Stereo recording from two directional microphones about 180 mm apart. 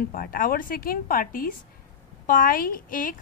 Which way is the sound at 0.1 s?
50° left (ahead or behind).